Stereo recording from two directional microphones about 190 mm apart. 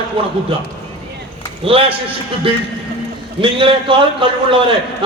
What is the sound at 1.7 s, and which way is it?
Speech, 30° right (ahead or behind).